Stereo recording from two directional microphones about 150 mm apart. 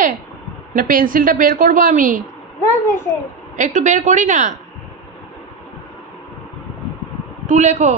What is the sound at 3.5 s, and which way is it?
A woman's voice, 55° right (ahead or behind).